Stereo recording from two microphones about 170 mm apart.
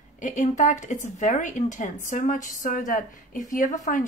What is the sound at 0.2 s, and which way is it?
A woman's voice, 45° left (ahead or behind).